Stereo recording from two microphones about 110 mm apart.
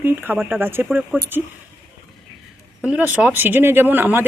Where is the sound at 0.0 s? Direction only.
20° right (ahead or behind).